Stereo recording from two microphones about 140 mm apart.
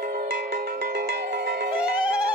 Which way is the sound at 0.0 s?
80° right.